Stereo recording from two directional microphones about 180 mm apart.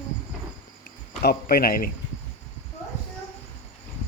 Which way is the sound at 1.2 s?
60° left (ahead or behind).